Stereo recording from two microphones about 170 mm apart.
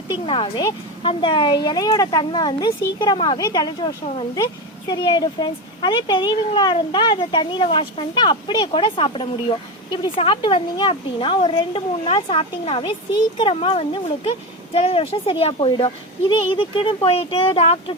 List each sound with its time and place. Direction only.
0.1 s speech: 30° left (ahead or behind)